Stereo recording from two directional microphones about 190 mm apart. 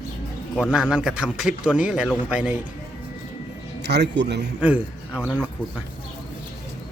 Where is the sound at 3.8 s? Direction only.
65° right (ahead or behind).